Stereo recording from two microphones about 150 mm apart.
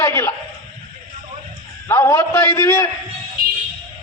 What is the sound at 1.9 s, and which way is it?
A man's voice, 20° left (ahead or behind).